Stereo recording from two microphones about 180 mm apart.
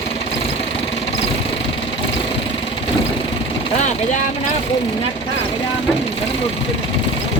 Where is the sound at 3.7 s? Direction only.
40° left (ahead or behind).